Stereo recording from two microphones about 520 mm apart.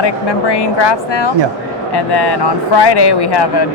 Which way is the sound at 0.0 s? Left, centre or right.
Left.